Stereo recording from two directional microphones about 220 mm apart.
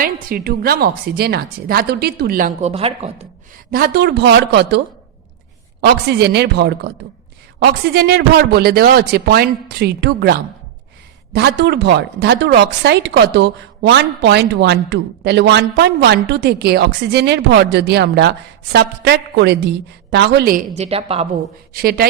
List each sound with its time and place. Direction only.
0.0 s speech: 40° right (ahead or behind)
3.7 s speech: 40° right (ahead or behind)
6.1 s speech: 45° right (ahead or behind)
20.7 s a woman's voice: 25° right (ahead or behind)
21.7 s speech: 45° right (ahead or behind)